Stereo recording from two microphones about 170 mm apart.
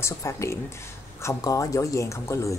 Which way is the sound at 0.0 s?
20° left (ahead or behind).